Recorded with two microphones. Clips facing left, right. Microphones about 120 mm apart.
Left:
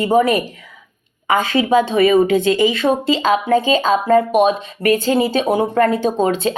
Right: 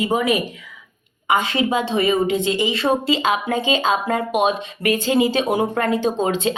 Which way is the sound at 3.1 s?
40° left (ahead or behind).